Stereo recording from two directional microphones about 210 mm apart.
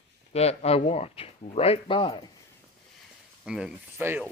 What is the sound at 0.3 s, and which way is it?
Speech, 30° left (ahead or behind).